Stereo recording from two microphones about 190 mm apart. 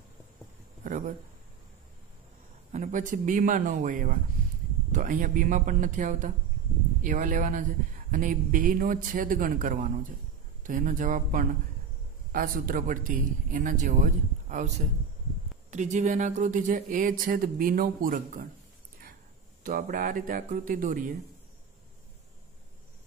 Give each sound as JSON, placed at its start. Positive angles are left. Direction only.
{"t": 0.8, "sound": "a sound", "side_deg": -45}
{"t": 2.7, "sound": "speech", "side_deg": -40}
{"t": 15.7, "sound": "speech", "side_deg": -40}
{"t": 19.6, "sound": "speech", "side_deg": -45}